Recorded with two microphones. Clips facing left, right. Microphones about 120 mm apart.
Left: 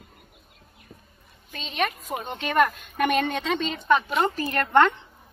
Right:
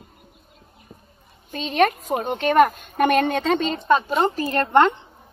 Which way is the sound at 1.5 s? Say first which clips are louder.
Right 9 dB; 50° right (ahead or behind).